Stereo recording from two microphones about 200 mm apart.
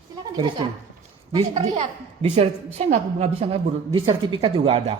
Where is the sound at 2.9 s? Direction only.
30° right (ahead or behind).